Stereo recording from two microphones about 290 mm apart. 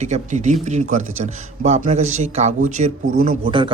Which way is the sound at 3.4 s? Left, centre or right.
Centre.